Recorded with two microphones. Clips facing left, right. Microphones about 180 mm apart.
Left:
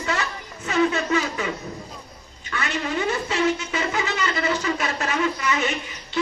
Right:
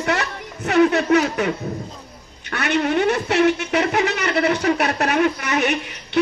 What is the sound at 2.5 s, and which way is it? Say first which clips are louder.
Speech: right 7 dB; 70° right (ahead or behind).